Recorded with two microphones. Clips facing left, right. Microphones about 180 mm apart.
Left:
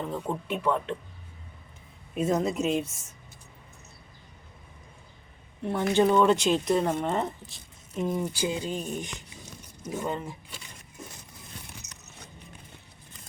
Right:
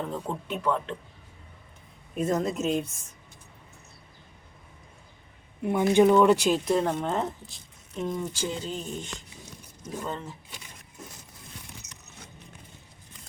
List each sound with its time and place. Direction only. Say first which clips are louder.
0.0 s speech: left 1 dB; 5° left (ahead or behind)
2.1 s speech: left 1 dB; 5° left (ahead or behind)
5.9 s speech: right 3 dB; 10° right (ahead or behind); by 10.3 s 15° left (ahead or behind)